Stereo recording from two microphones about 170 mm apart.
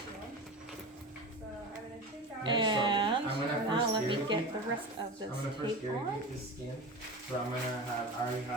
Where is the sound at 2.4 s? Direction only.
25° right (ahead or behind).